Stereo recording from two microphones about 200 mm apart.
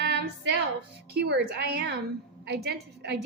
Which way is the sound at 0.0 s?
55° right (ahead or behind).